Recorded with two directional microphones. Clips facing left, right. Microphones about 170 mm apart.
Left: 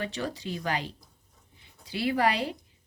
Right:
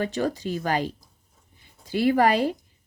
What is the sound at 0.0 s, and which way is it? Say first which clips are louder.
A woman's voice: right 7 dB; 45° right (ahead or behind).